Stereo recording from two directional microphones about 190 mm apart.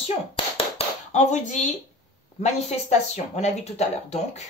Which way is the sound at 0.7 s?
40° left (ahead or behind).